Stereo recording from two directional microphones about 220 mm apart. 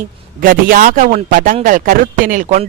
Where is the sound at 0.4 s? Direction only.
40° right (ahead or behind).